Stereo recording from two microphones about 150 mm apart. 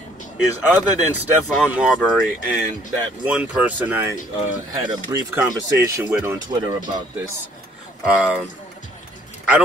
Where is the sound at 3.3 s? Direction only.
5° right (ahead or behind).